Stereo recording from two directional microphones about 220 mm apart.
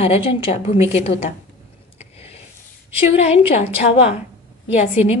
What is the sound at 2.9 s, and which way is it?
A woman's voice, 30° left (ahead or behind).